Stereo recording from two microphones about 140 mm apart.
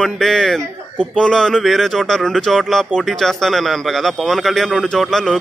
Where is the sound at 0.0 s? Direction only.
5° left (ahead or behind).